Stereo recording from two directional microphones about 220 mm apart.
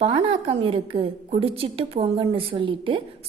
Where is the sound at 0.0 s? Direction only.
25° right (ahead or behind).